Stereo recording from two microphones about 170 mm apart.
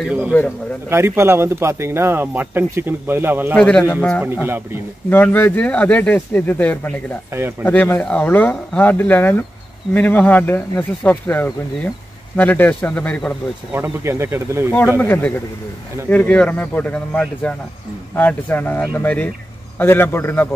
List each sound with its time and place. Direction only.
0.8 s speech: 15° right (ahead or behind)
3.5 s speech: 5° left (ahead or behind)
3.8 s speech: 15° left (ahead or behind)
4.2 s speech: 10° right (ahead or behind)
5.1 s speech: 10° left (ahead or behind)
7.3 s speech: 15° right (ahead or behind)
7.6 s speech: 10° left (ahead or behind)
13.7 s speech: 5° right (ahead or behind)
14.0 s speech: 15° right (ahead or behind)
14.7 s speech: 10° left (ahead or behind)